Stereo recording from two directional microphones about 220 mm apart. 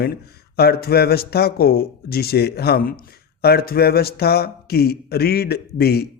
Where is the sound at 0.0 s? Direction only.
45° left (ahead or behind).